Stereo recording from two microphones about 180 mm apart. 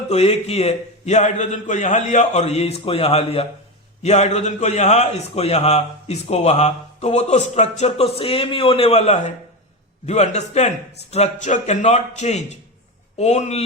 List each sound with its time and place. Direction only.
0.1 s a man's voice: 35° left (ahead or behind)